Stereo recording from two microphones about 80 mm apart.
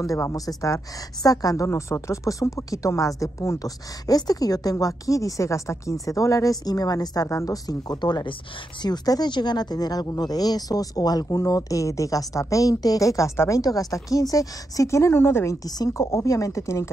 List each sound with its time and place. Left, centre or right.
0.0 s speech: left
1.7 s speech: left